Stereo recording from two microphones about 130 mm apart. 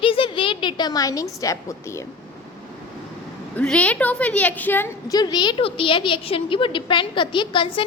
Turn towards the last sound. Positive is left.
turn(degrees=40)  # may be behind; listen again after turning